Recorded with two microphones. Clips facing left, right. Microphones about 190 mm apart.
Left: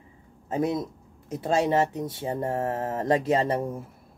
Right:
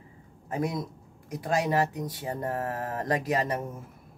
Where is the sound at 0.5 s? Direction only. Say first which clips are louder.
Left 4 dB; 25° left (ahead or behind).